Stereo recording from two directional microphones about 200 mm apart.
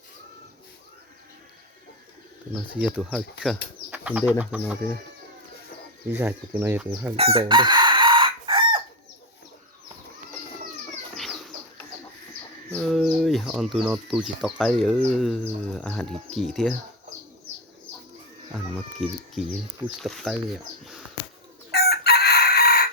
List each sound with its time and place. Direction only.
2.9 s speech: centre (ahead or behind)
3.9 s bird: 5° right (ahead or behind)
4.3 s speech: 5° right (ahead or behind)
6.1 s speech: 10° right (ahead or behind)
7.2 s chicken: 30° right (ahead or behind)
12.7 s speech: centre (ahead or behind)
18.5 s speech: centre (ahead or behind)
21.7 s chicken: 50° left (ahead or behind)